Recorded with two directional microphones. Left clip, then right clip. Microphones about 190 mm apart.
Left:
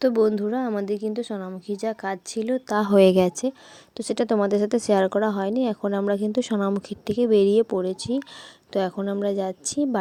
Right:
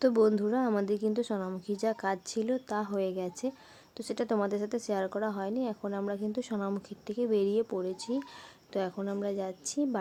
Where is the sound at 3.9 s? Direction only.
35° left (ahead or behind).